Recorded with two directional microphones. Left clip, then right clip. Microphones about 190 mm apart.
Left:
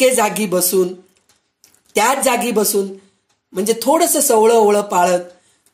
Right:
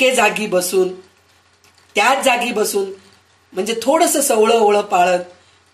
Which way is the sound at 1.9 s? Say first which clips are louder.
Right 1 dB; 50° left (ahead or behind).